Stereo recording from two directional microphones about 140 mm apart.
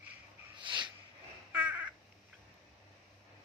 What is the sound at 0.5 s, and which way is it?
Snort, 35° right (ahead or behind).